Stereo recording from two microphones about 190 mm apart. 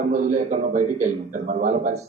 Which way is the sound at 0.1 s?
40° right (ahead or behind).